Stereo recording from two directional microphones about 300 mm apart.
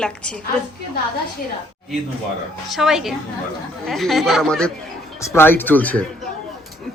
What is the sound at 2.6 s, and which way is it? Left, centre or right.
Speech, centre.